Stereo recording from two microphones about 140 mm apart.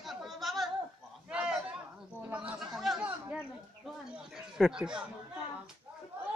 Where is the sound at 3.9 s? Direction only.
5° right (ahead or behind).